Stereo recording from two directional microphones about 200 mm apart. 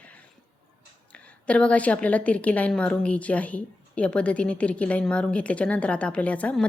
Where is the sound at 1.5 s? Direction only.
5° left (ahead or behind).